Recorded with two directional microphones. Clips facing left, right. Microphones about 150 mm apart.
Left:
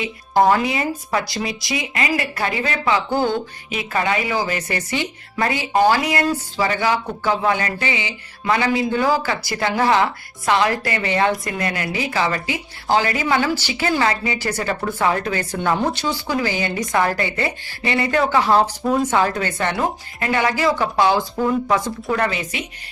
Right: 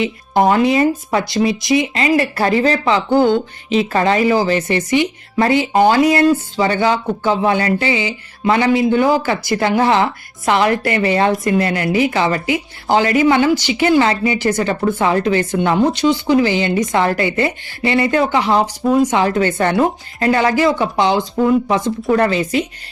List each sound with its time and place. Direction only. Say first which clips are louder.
0.0 s speech: right 2 dB; 25° right (ahead or behind)
20.2 s speech: right 5 dB; 35° right (ahead or behind)